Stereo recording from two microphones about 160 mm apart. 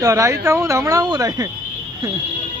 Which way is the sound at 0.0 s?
20° right (ahead or behind).